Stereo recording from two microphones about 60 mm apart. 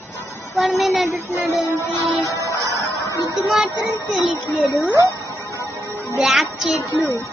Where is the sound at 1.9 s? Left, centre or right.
Left.